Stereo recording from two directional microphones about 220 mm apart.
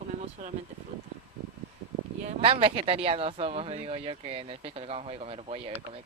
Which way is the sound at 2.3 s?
25° right (ahead or behind).